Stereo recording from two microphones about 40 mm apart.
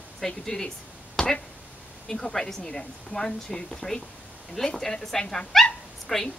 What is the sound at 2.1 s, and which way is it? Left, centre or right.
Speech, centre.